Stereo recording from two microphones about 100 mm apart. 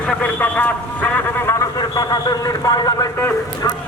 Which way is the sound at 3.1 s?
20° left (ahead or behind).